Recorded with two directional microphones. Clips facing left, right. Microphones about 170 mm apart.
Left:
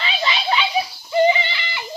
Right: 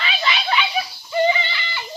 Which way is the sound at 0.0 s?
25° left (ahead or behind).